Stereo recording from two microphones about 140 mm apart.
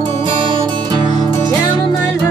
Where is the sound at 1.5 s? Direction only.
25° left (ahead or behind).